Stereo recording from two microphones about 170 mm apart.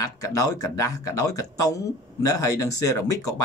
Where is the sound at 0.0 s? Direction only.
20° left (ahead or behind).